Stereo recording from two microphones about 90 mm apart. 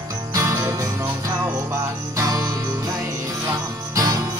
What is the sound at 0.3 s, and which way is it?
Music, 40° right (ahead or behind).